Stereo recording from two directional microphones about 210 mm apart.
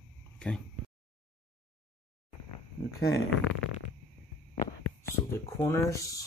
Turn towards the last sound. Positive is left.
turn(degrees=15)  # may be behind; listen again after turning